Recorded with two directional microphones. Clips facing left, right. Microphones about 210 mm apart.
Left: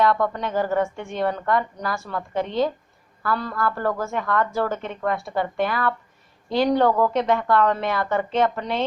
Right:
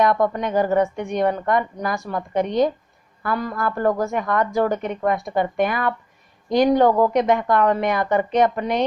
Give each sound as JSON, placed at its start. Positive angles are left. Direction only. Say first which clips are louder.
{"t": 0.0, "sound": "a woman's voice", "louder": "right 2 dB", "side_deg": -15}